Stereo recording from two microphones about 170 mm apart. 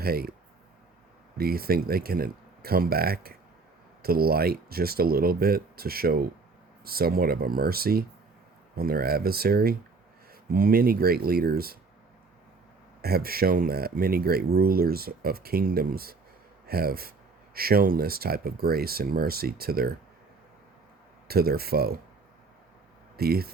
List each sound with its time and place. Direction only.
0.0 s speech: 65° right (ahead or behind)
1.4 s speech: 65° right (ahead or behind)
13.0 s speech: 65° right (ahead or behind)
21.2 s speech: 65° right (ahead or behind)
23.1 s speech: 65° right (ahead or behind)